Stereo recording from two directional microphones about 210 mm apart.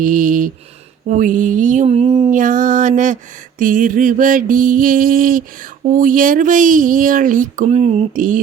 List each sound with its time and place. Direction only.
0.0 s speech: 40° right (ahead or behind)